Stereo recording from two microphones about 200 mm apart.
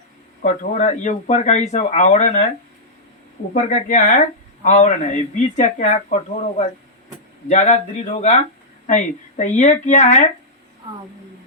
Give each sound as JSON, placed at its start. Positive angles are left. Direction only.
{"t": 0.4, "sound": "speech", "side_deg": 35}
{"t": 3.5, "sound": "speech", "side_deg": 40}
{"t": 7.4, "sound": "speech", "side_deg": 35}